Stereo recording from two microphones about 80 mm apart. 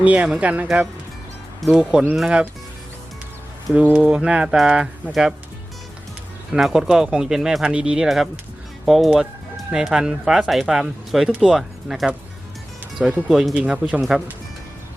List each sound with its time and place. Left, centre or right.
0.0 s speech: centre
1.8 s speech: centre
3.8 s speech: centre
6.5 s speech: centre
13.2 s speech: centre
13.5 s speech: centre